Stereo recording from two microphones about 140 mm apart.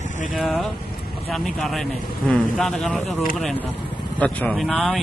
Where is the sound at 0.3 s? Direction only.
Centre (ahead or behind).